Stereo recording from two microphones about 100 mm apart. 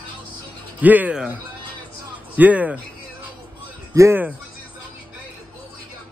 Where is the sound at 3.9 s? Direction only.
30° right (ahead or behind).